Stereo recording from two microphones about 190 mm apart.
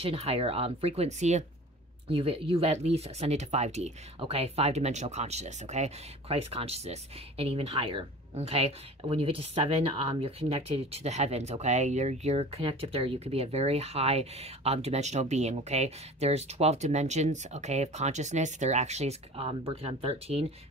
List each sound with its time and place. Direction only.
0.0 s speech: 30° right (ahead or behind)